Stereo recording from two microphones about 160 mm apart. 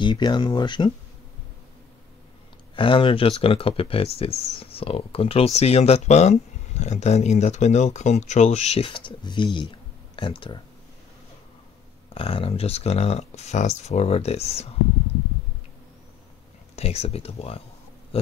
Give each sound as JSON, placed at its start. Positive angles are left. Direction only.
{"t": 0.0, "sound": "speech", "side_deg": 30}
{"t": 2.7, "sound": "speech", "side_deg": 30}
{"t": 12.1, "sound": "speech", "side_deg": 35}
{"t": 16.7, "sound": "speech", "side_deg": 40}
{"t": 18.1, "sound": "pig", "side_deg": 35}